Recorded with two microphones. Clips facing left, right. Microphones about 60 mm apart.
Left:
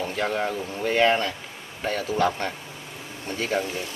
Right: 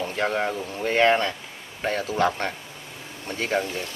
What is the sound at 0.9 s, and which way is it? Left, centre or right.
Speech, right.